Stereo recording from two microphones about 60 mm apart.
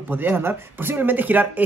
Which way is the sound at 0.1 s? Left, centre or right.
Right.